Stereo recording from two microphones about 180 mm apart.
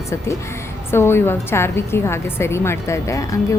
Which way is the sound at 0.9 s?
15° left (ahead or behind).